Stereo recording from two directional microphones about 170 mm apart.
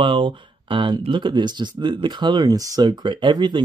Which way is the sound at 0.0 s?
30° right (ahead or behind).